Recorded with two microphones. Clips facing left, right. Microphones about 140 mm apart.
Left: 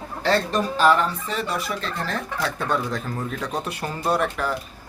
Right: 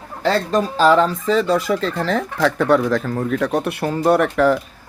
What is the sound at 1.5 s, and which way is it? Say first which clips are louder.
Speech: right 9 dB; 90° right.